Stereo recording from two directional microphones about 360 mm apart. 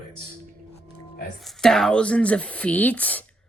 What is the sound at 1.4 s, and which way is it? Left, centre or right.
Speech, centre.